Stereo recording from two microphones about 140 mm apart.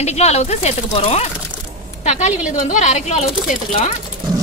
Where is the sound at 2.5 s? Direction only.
65° left (ahead or behind).